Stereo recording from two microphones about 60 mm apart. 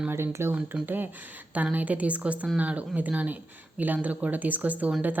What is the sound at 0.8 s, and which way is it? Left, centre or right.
A woman's voice, right.